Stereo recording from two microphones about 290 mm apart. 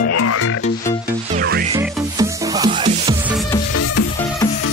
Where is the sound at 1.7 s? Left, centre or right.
Centre.